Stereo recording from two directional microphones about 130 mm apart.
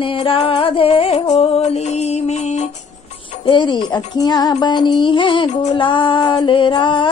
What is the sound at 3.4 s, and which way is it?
Music, 35° left (ahead or behind).